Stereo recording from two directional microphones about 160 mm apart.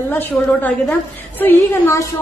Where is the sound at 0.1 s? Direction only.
10° left (ahead or behind).